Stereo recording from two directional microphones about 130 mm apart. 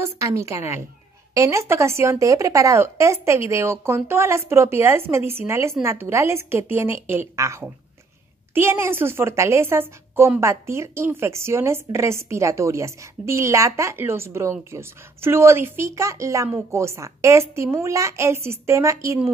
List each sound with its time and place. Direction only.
0.0 s a woman's voice: 25° right (ahead or behind)